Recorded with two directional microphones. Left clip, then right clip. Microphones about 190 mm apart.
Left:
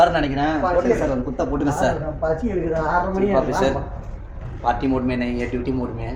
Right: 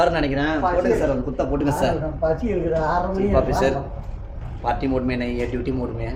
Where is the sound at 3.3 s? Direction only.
15° left (ahead or behind).